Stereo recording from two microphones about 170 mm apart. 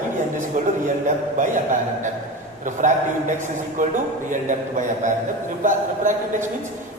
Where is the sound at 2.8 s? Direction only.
50° right (ahead or behind).